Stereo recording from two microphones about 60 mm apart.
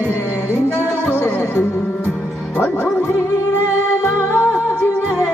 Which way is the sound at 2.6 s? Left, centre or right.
Left.